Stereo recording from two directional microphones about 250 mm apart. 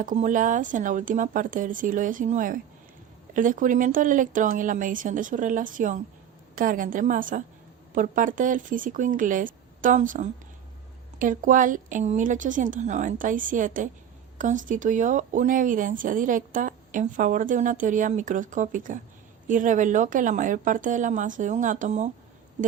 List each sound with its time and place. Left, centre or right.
0.0 s speech: right